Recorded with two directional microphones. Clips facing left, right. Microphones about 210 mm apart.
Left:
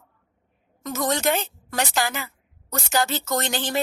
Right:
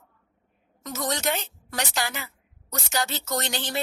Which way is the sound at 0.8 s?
50° left (ahead or behind).